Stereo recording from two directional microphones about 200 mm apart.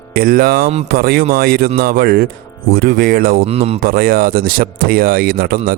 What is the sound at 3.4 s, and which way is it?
Speech, 30° right (ahead or behind).